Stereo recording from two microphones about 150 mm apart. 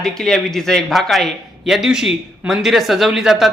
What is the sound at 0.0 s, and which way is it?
A man's voice, 5° left (ahead or behind).